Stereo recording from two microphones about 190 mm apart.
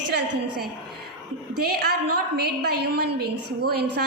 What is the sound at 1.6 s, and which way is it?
A woman's voice, 55° right (ahead or behind).